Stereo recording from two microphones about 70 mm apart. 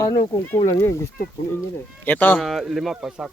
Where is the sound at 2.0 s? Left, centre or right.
Left.